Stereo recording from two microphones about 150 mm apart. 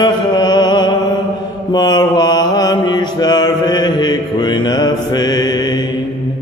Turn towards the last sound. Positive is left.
turn(degrees=30)  # may be behind; listen again after turning